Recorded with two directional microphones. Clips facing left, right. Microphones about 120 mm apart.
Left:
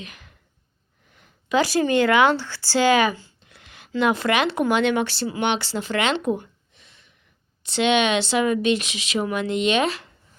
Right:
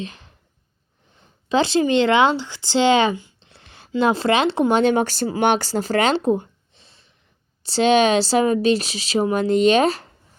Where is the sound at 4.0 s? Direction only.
30° right (ahead or behind).